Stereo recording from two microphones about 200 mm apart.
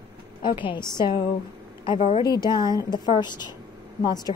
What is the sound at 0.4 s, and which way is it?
A woman's voice, 25° left (ahead or behind).